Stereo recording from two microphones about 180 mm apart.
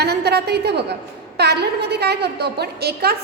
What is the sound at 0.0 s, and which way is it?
A woman's voice, 65° right (ahead or behind).